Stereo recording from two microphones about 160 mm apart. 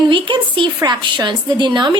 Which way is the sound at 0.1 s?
30° right (ahead or behind).